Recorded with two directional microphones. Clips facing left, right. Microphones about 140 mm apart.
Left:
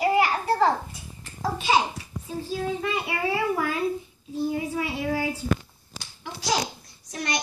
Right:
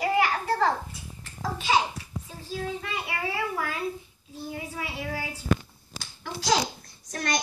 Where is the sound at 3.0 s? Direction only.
20° left (ahead or behind).